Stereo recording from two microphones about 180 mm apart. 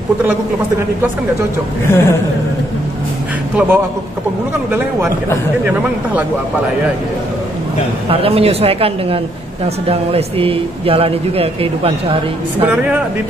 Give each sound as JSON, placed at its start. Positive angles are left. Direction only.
{"t": 1.9, "sound": "a woman's voice", "side_deg": 15}
{"t": 3.5, "sound": "speech", "side_deg": -10}
{"t": 8.1, "sound": "a man's voice", "side_deg": -35}